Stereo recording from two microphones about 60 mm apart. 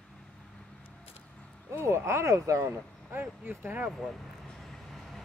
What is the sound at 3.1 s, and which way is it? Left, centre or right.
Speech, right.